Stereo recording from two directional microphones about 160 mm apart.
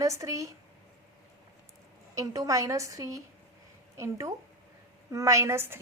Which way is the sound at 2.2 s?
20° right (ahead or behind).